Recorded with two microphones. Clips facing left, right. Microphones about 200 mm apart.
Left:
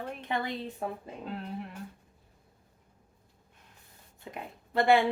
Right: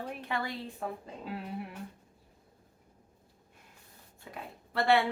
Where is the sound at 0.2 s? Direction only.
20° left (ahead or behind).